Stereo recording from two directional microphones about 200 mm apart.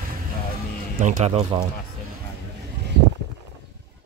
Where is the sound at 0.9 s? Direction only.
40° right (ahead or behind).